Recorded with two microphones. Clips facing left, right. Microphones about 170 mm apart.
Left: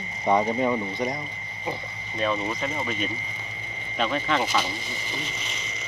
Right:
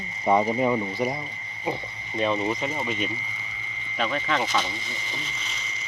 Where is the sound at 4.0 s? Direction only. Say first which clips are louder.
Left 1 dB; centre (ahead or behind).